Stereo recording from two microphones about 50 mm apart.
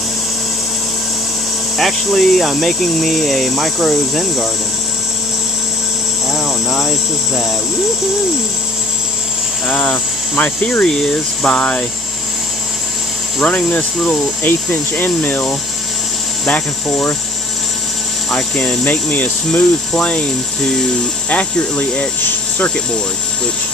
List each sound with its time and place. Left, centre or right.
1.8 s speech: centre
6.7 s a sound: centre
9.7 s speech: left
13.4 s speech: left
13.9 s speech: centre
14.4 s speech: left
16.8 s speech: centre
18.3 s speech: centre
18.9 s speech: left
19.6 s speech: centre